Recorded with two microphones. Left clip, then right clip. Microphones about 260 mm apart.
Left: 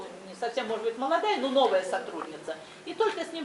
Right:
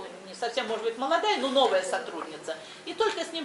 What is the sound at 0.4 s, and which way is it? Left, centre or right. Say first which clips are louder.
A woman's voice: right 1 dB; centre.